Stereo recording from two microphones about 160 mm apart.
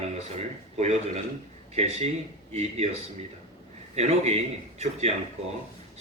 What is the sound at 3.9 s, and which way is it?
A man's voice, 45° right (ahead or behind).